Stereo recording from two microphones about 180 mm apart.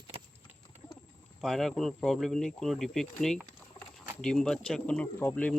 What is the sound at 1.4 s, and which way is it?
Speech, centre (ahead or behind).